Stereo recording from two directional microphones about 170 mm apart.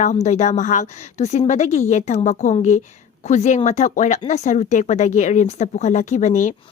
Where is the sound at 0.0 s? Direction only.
45° left (ahead or behind).